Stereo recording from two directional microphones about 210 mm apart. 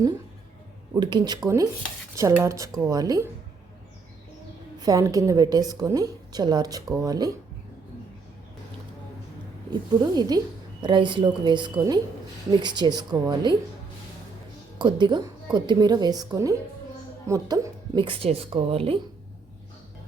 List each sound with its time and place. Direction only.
0.9 s a woman's voice: 20° right (ahead or behind)
4.8 s a woman's voice: 15° right (ahead or behind)
10.0 s speech: 20° right (ahead or behind)
14.8 s speech: 20° right (ahead or behind)